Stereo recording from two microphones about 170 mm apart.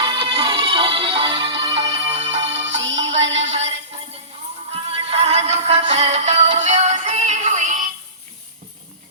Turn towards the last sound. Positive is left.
turn(degrees=-45)  # may be behind; listen again after turning